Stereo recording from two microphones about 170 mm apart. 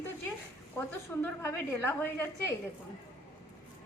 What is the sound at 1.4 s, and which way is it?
A woman's voice, 15° left (ahead or behind).